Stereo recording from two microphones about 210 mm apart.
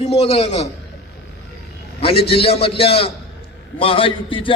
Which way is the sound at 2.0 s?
25° left (ahead or behind).